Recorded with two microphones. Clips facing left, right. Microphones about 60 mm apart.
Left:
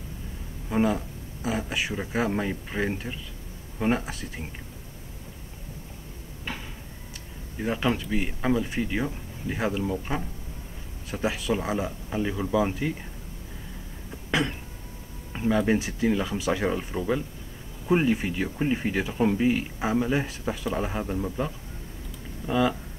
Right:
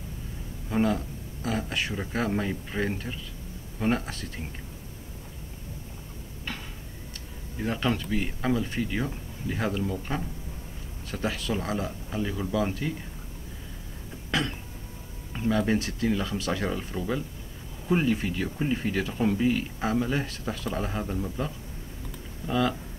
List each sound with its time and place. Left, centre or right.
0.7 s speech: centre
7.5 s speech: centre
14.3 s speech: centre
22.5 s speech: centre